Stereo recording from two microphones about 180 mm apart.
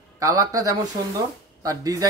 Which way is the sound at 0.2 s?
20° right (ahead or behind).